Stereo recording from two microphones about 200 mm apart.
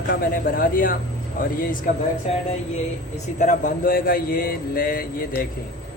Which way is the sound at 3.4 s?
40° left (ahead or behind).